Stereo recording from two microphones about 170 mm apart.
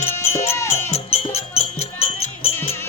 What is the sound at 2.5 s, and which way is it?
Music, 15° left (ahead or behind).